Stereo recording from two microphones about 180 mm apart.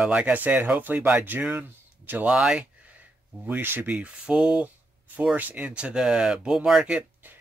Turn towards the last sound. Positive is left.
turn(degrees=-10)  # may be behind; listen again after turning